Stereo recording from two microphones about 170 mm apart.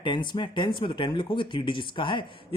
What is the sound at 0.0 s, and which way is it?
Speech, 30° left (ahead or behind).